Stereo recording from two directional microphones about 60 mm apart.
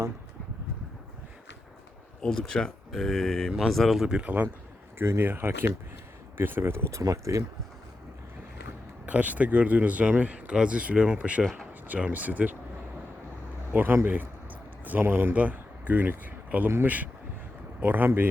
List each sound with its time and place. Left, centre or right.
2.2 s speech: centre
4.9 s speech: right
5.2 s speech: right
6.9 s speech: right
9.0 s speech: right
13.7 s speech: right
15.4 s speech: right